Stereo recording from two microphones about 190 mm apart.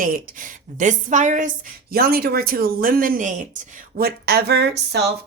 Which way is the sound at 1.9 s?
55° right (ahead or behind).